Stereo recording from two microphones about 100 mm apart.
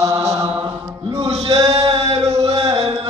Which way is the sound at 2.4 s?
75° right (ahead or behind).